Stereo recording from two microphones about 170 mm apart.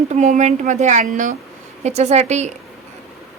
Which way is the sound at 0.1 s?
45° right (ahead or behind).